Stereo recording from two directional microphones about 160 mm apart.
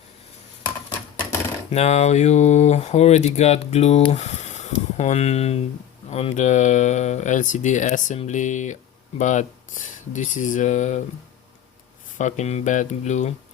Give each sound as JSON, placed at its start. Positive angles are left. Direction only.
{"t": 1.7, "sound": "speech", "side_deg": 45}
{"t": 12.1, "sound": "speech", "side_deg": 45}